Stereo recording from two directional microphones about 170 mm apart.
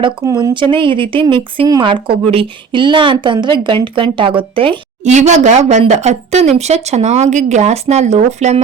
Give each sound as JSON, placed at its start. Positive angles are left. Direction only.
{"t": 0.0, "sound": "a woman's voice", "side_deg": -25}